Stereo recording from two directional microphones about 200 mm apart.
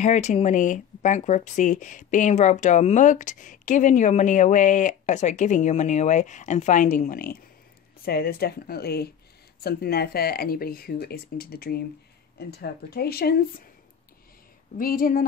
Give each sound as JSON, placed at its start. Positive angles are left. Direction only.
{"t": 0.0, "sound": "speech", "side_deg": 35}
{"t": 14.8, "sound": "speech", "side_deg": 45}